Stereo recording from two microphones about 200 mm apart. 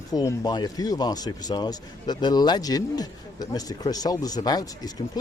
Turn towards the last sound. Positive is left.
turn(degrees=20)  # may be behind; listen again after turning